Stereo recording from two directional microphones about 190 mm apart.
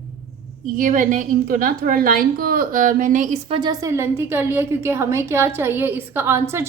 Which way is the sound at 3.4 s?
25° right (ahead or behind).